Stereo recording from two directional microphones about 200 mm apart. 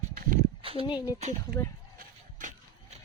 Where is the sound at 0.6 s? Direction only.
30° right (ahead or behind).